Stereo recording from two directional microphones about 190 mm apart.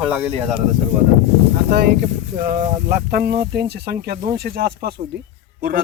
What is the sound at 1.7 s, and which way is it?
A man's voice, 60° right (ahead or behind).